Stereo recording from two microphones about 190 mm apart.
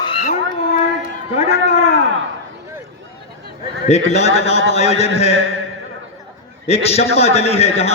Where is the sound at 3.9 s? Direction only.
35° left (ahead or behind).